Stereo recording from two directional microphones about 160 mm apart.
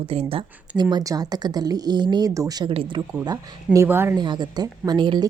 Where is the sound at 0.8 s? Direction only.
25° right (ahead or behind).